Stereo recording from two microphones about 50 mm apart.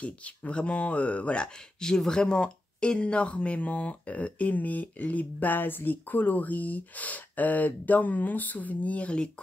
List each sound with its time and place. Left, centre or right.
0.0 s speech: left